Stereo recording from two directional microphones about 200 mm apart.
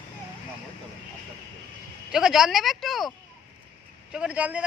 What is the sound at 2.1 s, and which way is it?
Speech, 5° right (ahead or behind).